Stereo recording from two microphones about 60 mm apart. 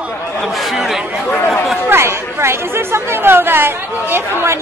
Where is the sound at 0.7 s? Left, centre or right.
Centre.